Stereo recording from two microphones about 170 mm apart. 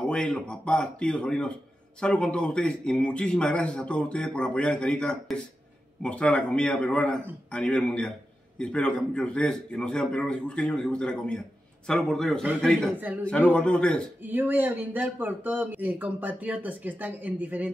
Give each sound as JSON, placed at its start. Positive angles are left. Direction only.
{"t": 0.1, "sound": "a man's voice", "side_deg": 5}
{"t": 14.2, "sound": "speech", "side_deg": -10}